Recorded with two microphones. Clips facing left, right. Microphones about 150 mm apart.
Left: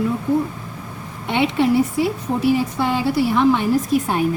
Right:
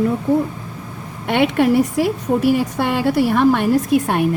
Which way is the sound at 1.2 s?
60° right (ahead or behind).